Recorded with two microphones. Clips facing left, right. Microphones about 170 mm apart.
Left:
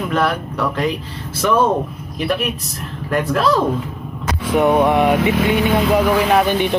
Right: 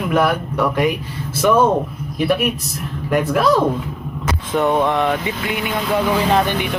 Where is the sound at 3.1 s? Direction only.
10° right (ahead or behind).